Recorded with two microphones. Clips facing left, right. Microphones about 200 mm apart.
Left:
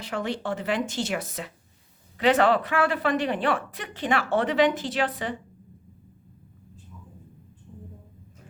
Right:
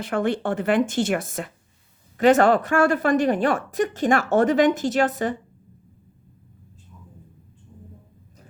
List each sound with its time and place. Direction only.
0.0 s a woman's voice: 55° right (ahead or behind)